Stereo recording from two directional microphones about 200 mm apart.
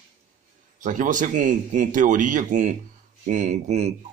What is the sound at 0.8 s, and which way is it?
Speech, 40° right (ahead or behind).